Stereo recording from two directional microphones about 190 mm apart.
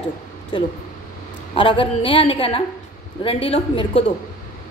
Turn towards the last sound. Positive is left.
turn(degrees=25)  # may be behind; listen again after turning